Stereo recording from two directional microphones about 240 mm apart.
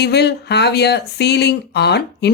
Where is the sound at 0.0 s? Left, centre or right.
Left.